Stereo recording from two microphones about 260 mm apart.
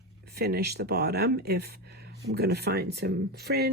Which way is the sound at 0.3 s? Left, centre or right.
Right.